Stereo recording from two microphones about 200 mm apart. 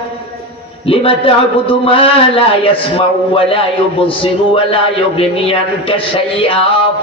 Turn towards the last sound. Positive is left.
turn(degrees=30)  # may be behind; listen again after turning